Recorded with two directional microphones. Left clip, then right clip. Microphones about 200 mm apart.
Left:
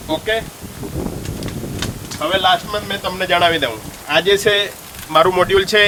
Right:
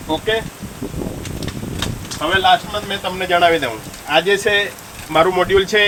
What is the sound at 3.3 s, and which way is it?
Speech, 25° left (ahead or behind).